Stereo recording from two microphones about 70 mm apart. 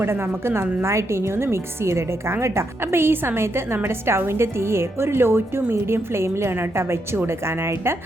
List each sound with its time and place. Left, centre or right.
0.0 s a woman's voice: right